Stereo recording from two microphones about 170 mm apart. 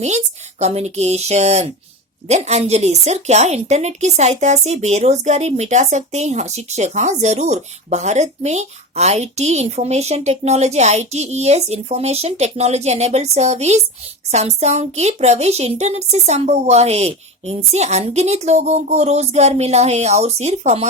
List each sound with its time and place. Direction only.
0.6 s a woman's voice: 40° right (ahead or behind)